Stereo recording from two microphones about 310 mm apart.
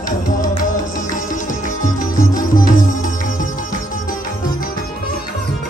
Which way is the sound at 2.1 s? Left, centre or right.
Centre.